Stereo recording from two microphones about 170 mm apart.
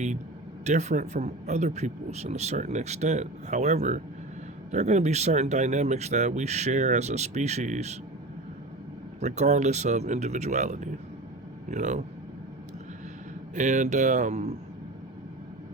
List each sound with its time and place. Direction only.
0.6 s a man's voice: 45° right (ahead or behind)
9.2 s a man's voice: 45° right (ahead or behind)
13.6 s a man's voice: 45° right (ahead or behind)